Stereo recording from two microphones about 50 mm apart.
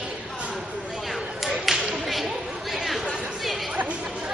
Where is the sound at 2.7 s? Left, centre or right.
Centre.